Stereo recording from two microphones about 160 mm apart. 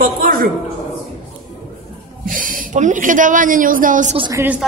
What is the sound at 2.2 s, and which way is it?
A woman's voice, 60° right (ahead or behind).